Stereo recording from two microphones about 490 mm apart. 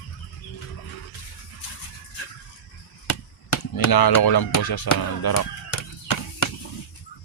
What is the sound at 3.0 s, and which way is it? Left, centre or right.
Speech, left.